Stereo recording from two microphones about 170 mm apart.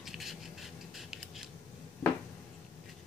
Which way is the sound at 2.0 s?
15° left (ahead or behind).